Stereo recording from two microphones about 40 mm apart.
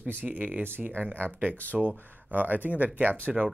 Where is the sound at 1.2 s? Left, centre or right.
Right.